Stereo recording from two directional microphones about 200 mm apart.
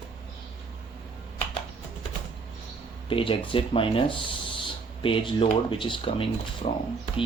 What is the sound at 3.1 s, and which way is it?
Speech, 25° left (ahead or behind).